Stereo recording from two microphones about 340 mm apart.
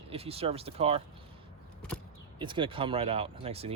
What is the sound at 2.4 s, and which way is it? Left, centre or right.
Speech, centre.